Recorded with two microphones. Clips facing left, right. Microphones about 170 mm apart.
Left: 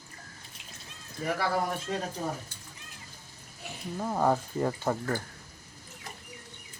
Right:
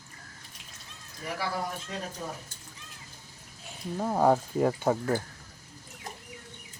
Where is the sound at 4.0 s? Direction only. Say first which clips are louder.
Right 3 dB; 15° right (ahead or behind).